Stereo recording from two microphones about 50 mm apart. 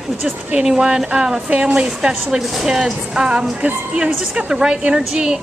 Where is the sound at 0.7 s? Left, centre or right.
Centre.